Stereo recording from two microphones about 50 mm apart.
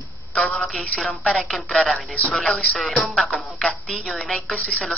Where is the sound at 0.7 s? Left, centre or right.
Centre.